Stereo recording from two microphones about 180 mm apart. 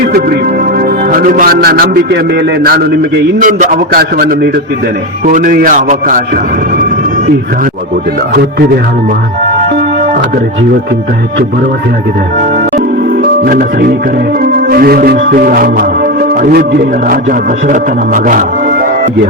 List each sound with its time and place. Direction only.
1.1 s music: 50° right (ahead or behind)
3.4 s a man's voice: 50° right (ahead or behind)
13.4 s a man's voice: 55° right (ahead or behind)
14.7 s music: 55° right (ahead or behind)
17.7 s a man's voice: 50° right (ahead or behind)